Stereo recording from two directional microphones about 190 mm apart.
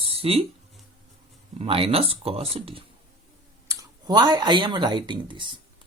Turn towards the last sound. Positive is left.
turn(degrees=-25)  # may be behind; listen again after turning